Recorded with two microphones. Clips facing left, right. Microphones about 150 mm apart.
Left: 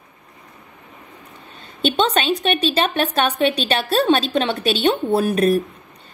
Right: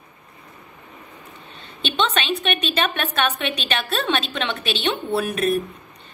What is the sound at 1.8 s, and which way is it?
A woman's voice, 40° left (ahead or behind).